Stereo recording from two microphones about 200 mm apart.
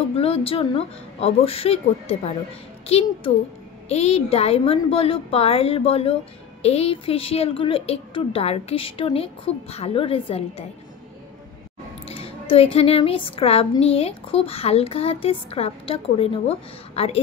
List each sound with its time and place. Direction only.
0.1 s speech: 30° left (ahead or behind)
12.1 s speech: 30° left (ahead or behind)